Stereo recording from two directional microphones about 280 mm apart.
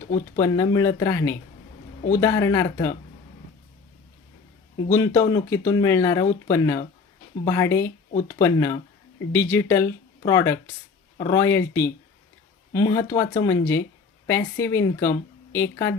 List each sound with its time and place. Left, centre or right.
0.3 s speech: centre
4.9 s speech: centre